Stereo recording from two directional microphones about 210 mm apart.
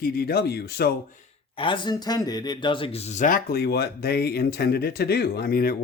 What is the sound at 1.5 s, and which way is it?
Speech, 25° left (ahead or behind).